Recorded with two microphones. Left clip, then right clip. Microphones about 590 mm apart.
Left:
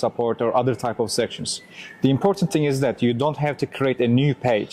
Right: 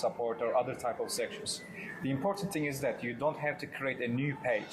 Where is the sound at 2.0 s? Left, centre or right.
Left.